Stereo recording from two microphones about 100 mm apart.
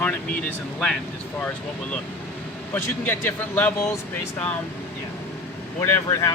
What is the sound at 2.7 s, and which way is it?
Speech, 20° left (ahead or behind).